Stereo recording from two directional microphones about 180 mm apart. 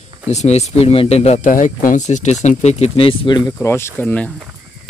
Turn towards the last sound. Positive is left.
turn(degrees=10)  # may be behind; listen again after turning